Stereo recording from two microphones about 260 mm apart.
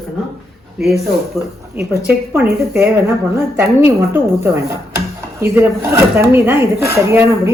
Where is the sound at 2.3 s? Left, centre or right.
Centre.